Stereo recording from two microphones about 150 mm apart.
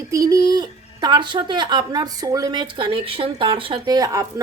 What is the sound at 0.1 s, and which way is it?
A woman's voice, 25° right (ahead or behind).